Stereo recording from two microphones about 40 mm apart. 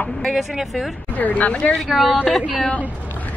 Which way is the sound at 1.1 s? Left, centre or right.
Left.